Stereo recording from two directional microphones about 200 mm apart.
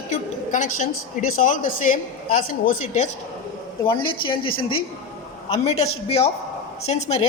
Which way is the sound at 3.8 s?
25° left (ahead or behind).